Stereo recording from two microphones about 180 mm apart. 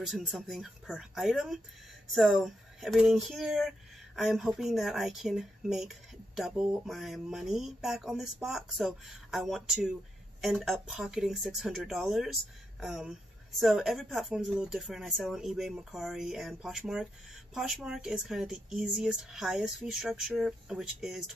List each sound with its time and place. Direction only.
0.1 s speech: centre (ahead or behind)